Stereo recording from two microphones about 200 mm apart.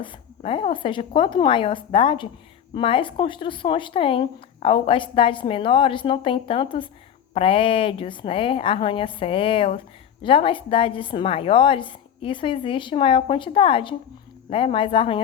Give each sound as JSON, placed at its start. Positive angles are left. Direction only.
{"t": 0.0, "sound": "speech", "side_deg": 25}